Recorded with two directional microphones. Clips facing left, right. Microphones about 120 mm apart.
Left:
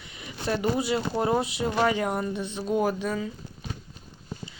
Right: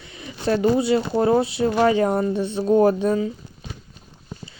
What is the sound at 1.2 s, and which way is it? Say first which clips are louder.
Speech: right 7 dB; 15° left (ahead or behind).